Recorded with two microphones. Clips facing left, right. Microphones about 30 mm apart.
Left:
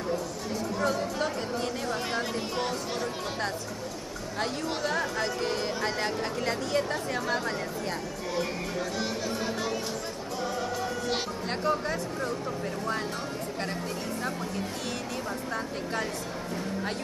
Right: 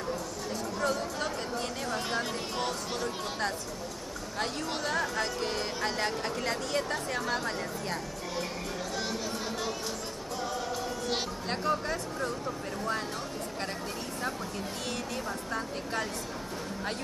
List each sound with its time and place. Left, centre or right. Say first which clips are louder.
0.7 s chatter: left 3 dB; centre
4.4 s music: left 3 dB; centre
10.4 s music: left 3 dB; centre
15.5 s a woman's voice: left 1 dB; centre